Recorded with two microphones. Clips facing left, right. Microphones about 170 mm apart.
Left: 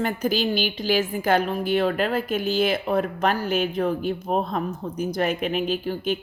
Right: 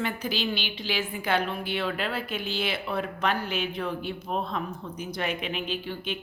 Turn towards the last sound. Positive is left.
turn(degrees=40)  # may be behind; listen again after turning